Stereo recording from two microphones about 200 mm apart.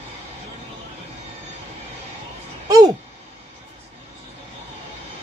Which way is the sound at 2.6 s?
20° right (ahead or behind).